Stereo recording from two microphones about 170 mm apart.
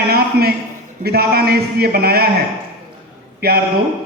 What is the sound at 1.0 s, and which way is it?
A man's voice, 65° right (ahead or behind).